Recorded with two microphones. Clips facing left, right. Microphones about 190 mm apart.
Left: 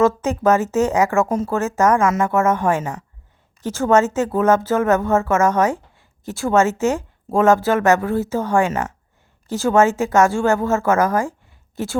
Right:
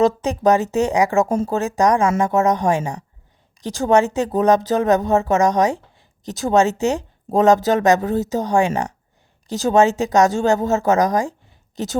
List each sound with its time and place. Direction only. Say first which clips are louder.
0.0 s a woman's voice: even; 15° right (ahead or behind)
2.0 s speech: even; 30° right (ahead or behind)
2.2 s a woman's voice: even; 15° right (ahead or behind)